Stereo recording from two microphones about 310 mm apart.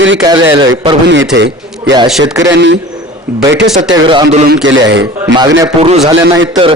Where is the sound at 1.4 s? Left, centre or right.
Right.